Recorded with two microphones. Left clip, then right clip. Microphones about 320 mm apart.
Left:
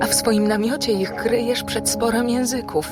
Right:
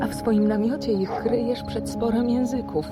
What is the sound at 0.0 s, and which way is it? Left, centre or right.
A woman's voice, left.